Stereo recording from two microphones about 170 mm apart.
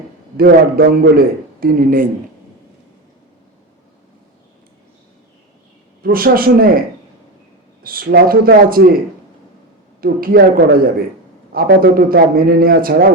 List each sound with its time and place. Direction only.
0.3 s a man's voice: 60° right (ahead or behind)
6.0 s a man's voice: 60° right (ahead or behind)
7.9 s a man's voice: 60° right (ahead or behind)
10.0 s a man's voice: 60° right (ahead or behind)